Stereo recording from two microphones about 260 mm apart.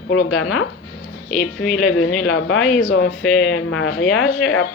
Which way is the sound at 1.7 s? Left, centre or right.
Left.